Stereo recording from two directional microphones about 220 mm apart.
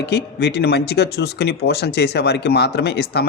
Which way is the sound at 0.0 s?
50° left (ahead or behind).